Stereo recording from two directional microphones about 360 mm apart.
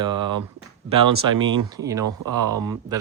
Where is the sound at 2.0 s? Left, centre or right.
Right.